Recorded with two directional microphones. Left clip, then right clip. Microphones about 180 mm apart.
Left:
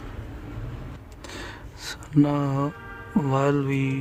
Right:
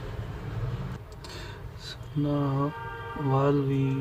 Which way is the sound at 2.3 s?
75° left (ahead or behind).